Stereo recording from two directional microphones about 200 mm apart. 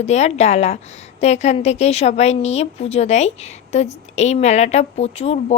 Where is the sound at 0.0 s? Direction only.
35° left (ahead or behind).